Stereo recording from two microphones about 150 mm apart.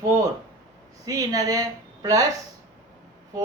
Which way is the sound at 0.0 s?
25° right (ahead or behind).